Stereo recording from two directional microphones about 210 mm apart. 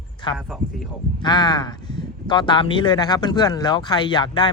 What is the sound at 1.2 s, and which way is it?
A man's voice, 20° left (ahead or behind).